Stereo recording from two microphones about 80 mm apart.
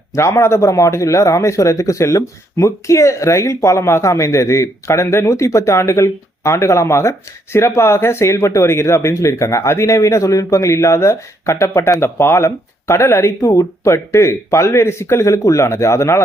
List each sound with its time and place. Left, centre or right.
0.1 s speech: left